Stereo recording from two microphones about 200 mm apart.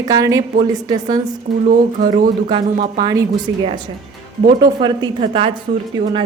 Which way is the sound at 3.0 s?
20° right (ahead or behind).